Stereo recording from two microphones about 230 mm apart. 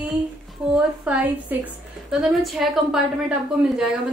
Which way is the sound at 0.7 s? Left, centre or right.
Centre.